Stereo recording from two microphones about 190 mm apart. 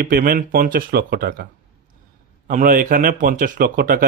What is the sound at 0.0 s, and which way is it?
Speech, 50° right (ahead or behind).